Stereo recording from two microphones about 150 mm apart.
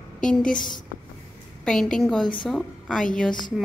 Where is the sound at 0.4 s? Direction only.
65° left (ahead or behind).